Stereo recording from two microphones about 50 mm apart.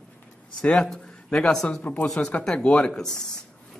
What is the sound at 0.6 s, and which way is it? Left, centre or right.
Speech, centre.